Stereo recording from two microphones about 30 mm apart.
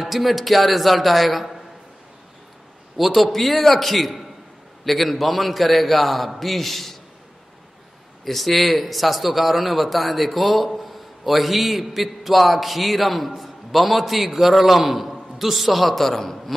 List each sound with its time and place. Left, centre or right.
0.0 s a man's voice: centre
3.0 s a man's voice: centre
3.3 s a man's voice: centre
8.3 s a man's voice: centre